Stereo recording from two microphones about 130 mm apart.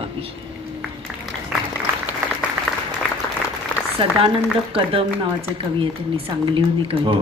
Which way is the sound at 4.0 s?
40° right (ahead or behind).